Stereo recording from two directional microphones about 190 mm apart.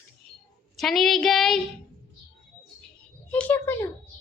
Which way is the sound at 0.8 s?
Centre (ahead or behind).